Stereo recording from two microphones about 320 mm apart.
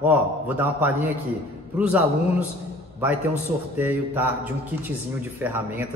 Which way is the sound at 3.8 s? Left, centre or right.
Centre.